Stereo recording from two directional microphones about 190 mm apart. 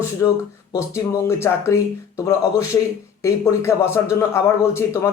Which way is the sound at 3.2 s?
15° left (ahead or behind).